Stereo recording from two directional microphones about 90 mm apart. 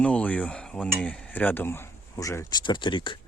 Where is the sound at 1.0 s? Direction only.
15° left (ahead or behind).